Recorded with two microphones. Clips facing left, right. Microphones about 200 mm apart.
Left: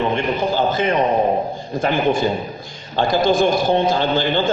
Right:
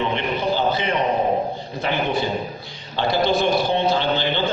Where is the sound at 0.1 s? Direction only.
45° left (ahead or behind).